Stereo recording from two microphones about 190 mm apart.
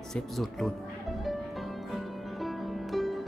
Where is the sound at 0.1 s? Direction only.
Centre (ahead or behind).